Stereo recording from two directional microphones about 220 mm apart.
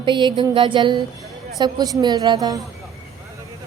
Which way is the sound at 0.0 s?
20° right (ahead or behind).